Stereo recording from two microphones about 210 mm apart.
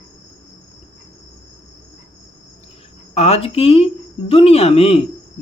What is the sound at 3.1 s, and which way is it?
Speech, 30° left (ahead or behind).